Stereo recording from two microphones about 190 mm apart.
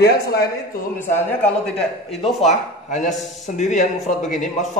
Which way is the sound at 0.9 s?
5° left (ahead or behind).